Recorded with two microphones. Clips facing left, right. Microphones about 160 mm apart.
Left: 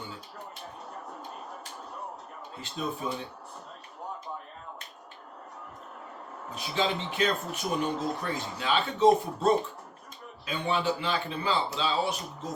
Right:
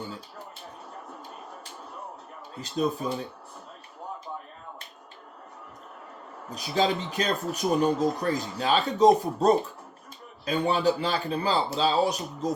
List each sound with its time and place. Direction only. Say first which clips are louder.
2.6 s speech: right 7 dB; 40° right (ahead or behind)
6.5 s speech: right 4 dB; 40° right (ahead or behind)